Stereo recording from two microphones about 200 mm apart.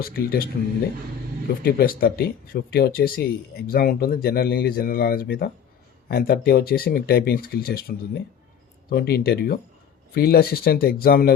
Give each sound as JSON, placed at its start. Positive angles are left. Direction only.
{"t": 0.0, "sound": "speech", "side_deg": 45}
{"t": 1.6, "sound": "speech", "side_deg": 50}